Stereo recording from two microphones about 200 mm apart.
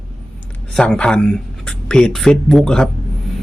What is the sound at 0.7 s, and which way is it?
Speech, 5° left (ahead or behind).